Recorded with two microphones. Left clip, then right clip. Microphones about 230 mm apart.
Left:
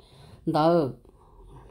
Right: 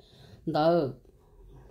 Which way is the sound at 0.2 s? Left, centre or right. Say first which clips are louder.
Left 3 dB; left.